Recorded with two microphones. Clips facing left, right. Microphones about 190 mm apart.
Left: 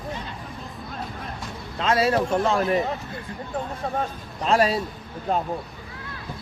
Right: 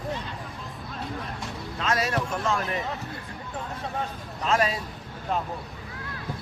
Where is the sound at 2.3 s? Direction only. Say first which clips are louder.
Left 7 dB; 35° left (ahead or behind).